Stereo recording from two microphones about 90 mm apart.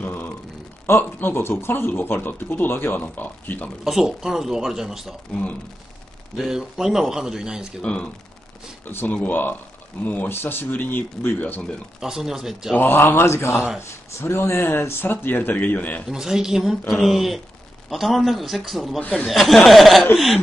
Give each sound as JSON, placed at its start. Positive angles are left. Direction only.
{"t": 0.0, "sound": "a sound", "side_deg": 20}
{"t": 0.8, "sound": "speech", "side_deg": 25}
{"t": 3.8, "sound": "a man's voice", "side_deg": -5}
{"t": 5.3, "sound": "speech", "side_deg": 15}
{"t": 6.3, "sound": "a man's voice", "side_deg": -5}
{"t": 7.8, "sound": "speech", "side_deg": 10}
{"t": 12.0, "sound": "a man's voice", "side_deg": -5}
{"t": 12.7, "sound": "speech", "side_deg": 20}
{"t": 16.1, "sound": "a man's voice", "side_deg": -5}